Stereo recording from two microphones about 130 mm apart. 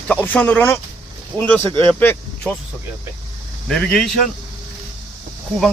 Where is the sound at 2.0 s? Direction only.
10° left (ahead or behind).